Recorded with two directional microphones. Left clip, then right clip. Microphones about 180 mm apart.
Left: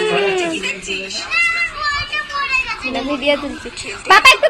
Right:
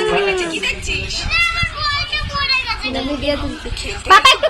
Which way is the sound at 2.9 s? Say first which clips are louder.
Left 6 dB; 10° left (ahead or behind).